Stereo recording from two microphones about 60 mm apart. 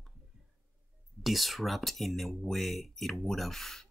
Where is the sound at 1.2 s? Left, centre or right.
Centre.